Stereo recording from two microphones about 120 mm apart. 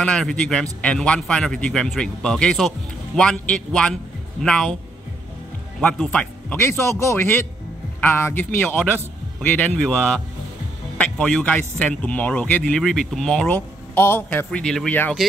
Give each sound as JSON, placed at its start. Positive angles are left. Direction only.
{"t": 0.0, "sound": "a man's voice", "side_deg": 5}
{"t": 5.8, "sound": "a man's voice", "side_deg": 5}
{"t": 14.6, "sound": "speech", "side_deg": 5}